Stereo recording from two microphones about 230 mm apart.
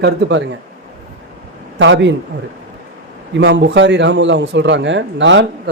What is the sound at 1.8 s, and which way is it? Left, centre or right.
Speech, right.